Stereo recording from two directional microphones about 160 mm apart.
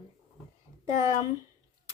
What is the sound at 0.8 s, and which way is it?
Speech, 20° right (ahead or behind).